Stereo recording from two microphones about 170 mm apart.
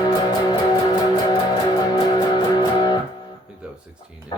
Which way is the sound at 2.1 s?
25° left (ahead or behind).